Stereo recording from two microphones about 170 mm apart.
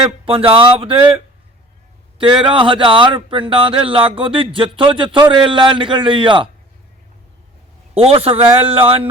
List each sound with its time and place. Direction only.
0.0 s speech: 30° right (ahead or behind)
7.9 s speech: 35° right (ahead or behind)